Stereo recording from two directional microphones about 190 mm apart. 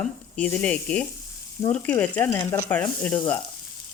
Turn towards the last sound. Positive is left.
turn(degrees=10)  # may be behind; listen again after turning